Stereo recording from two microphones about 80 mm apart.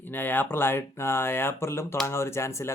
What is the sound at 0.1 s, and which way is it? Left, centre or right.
Speech, left.